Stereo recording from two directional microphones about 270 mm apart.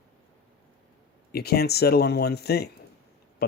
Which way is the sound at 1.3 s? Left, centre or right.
Left.